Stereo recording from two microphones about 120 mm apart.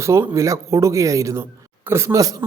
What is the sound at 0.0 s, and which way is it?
Speech, 25° right (ahead or behind).